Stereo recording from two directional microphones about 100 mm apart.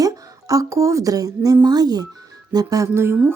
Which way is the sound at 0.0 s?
35° right (ahead or behind).